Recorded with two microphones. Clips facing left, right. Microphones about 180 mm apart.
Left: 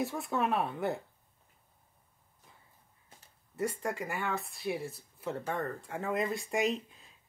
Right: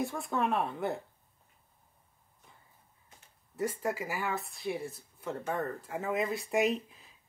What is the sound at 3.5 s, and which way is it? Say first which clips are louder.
Speech: right 1 dB; centre (ahead or behind).